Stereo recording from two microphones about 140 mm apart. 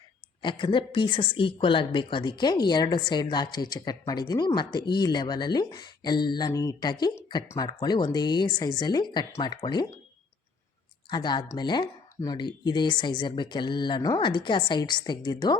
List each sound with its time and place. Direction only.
0.4 s a woman's voice: 35° left (ahead or behind)
11.1 s a woman's voice: 30° left (ahead or behind)